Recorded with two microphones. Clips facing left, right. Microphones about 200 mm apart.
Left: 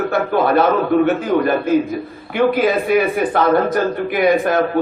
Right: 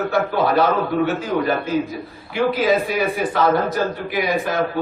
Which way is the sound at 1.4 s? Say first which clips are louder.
Left 5 dB; 55° left (ahead or behind).